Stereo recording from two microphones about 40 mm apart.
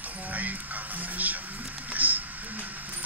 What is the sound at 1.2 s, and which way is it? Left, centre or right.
Music, right.